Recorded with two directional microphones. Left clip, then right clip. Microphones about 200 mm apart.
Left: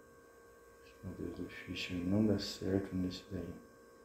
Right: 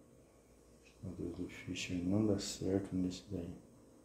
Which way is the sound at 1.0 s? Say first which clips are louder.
Even; 5° right (ahead or behind).